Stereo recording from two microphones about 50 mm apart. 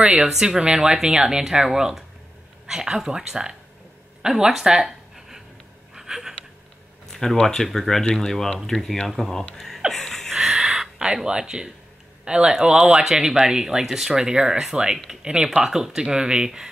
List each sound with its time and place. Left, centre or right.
0.2 s speech: centre
4.5 s a sound: centre
7.1 s a sound: centre
7.4 s speech: centre
8.0 s speech: left
8.3 s speech: centre
9.8 s gasp: centre
10.3 s a sound: centre
11.2 s speech: centre